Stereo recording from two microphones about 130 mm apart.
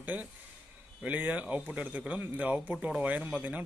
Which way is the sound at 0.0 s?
10° right (ahead or behind).